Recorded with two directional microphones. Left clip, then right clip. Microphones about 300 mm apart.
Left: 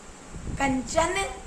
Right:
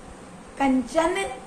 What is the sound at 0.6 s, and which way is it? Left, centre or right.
Speech, left.